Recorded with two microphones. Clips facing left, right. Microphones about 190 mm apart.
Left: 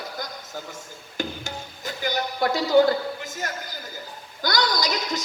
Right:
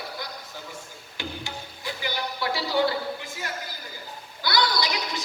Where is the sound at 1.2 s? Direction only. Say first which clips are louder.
Left 4 dB; 45° left (ahead or behind).